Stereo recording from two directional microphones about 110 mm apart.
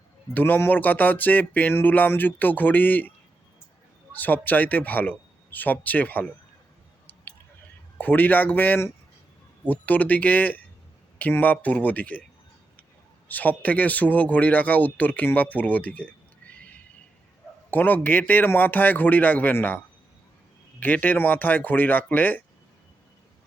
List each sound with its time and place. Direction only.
0.3 s speech: 15° left (ahead or behind)
4.1 s speech: 15° left (ahead or behind)
7.9 s speech: 15° left (ahead or behind)
13.2 s speech: 15° left (ahead or behind)
17.7 s speech: 15° left (ahead or behind)